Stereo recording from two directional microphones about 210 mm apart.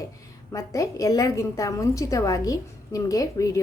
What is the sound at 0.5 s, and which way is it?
A woman's voice, 15° left (ahead or behind).